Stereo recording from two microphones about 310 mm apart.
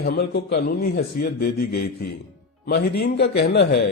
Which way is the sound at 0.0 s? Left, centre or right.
Left.